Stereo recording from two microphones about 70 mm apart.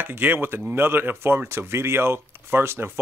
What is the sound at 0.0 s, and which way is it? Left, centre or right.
Speech, right.